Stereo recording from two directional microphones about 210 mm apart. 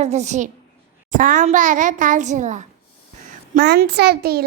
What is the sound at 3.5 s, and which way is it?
Speech, 50° right (ahead or behind).